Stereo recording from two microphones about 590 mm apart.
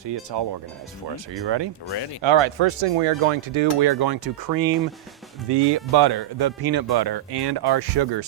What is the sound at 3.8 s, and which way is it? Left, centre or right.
Speech, right.